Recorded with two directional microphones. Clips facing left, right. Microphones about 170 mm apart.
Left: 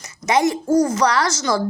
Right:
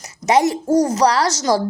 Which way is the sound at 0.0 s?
35° right (ahead or behind).